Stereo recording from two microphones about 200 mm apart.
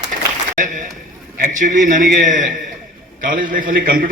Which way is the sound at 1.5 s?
40° right (ahead or behind).